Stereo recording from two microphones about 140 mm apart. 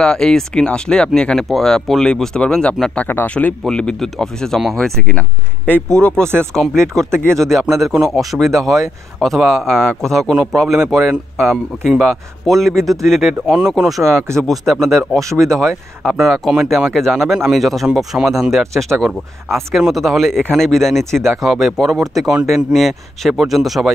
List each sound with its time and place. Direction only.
0.0 s speech: 5° left (ahead or behind)
15.1 s speech: 20° right (ahead or behind)
15.4 s speech: centre (ahead or behind)